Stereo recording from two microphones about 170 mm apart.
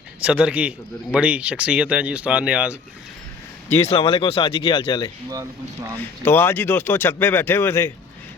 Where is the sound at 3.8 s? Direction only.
35° left (ahead or behind).